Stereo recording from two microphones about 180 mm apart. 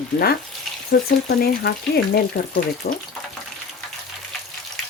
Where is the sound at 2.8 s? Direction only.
60° left (ahead or behind).